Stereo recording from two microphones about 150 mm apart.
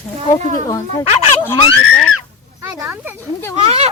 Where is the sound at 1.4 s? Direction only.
30° left (ahead or behind).